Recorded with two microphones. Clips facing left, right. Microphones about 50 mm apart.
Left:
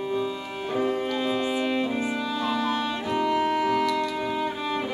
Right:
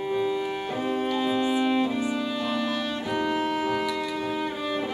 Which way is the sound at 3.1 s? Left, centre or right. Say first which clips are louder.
Left 3 dB; centre.